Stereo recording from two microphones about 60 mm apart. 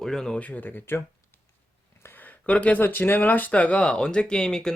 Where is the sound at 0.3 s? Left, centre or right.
Left.